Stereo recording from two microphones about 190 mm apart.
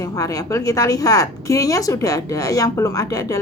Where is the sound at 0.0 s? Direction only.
15° left (ahead or behind).